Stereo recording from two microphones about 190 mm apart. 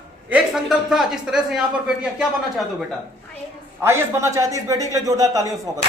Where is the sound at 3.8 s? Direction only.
15° right (ahead or behind).